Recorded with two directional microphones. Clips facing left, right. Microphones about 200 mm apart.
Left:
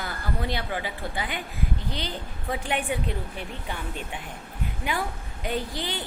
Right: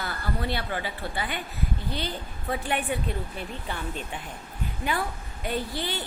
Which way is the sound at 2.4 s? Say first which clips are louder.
Even; 15° left (ahead or behind).